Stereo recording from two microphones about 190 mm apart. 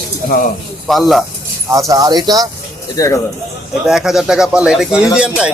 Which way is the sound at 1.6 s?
15° right (ahead or behind).